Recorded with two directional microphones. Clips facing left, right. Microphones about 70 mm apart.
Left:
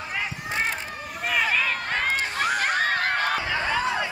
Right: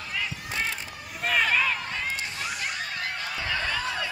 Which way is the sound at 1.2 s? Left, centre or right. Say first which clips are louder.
Even; centre.